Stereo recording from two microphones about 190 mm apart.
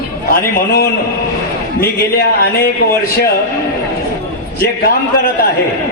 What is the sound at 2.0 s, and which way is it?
Speech, 55° left (ahead or behind).